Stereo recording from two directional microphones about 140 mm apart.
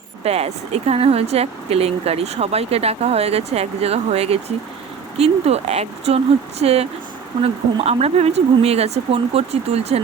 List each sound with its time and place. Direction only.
0.3 s speech: 45° right (ahead or behind)